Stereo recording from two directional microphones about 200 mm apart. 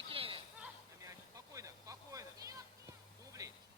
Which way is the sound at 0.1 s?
30° right (ahead or behind).